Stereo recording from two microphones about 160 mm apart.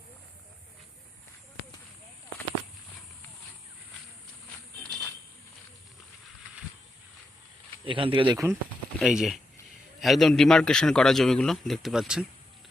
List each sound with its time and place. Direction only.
4.8 s a sound: 5° left (ahead or behind)
7.9 s speech: 30° right (ahead or behind)
9.0 s a man's voice: centre (ahead or behind)